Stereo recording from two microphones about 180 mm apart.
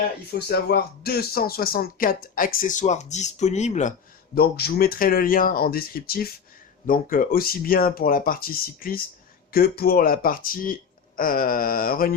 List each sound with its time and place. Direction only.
0.3 s speech: 60° left (ahead or behind); by 3.9 s 40° left (ahead or behind)
4.4 s speech: 60° left (ahead or behind)